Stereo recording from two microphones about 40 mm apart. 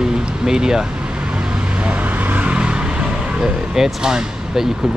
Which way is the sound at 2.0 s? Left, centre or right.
Right.